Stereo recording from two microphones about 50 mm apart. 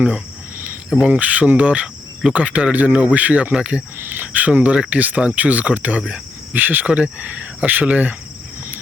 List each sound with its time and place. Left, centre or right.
1.0 s speech: right
3.9 s speech: right
6.5 s speech: right